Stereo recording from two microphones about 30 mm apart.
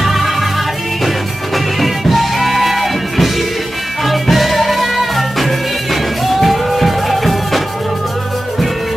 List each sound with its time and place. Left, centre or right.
0.0 s music: centre